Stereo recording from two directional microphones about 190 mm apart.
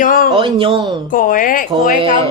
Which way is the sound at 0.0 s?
45° left (ahead or behind).